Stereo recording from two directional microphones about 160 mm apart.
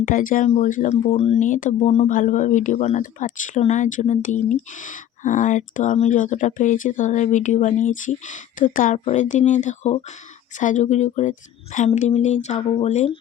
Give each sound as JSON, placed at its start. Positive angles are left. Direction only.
{"t": 0.0, "sound": "speech", "side_deg": 55}
{"t": 1.5, "sound": "speech", "side_deg": 55}